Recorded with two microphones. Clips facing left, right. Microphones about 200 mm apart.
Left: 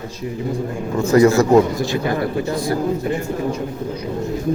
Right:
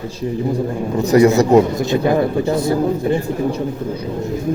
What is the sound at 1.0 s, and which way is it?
A man's voice, 20° right (ahead or behind).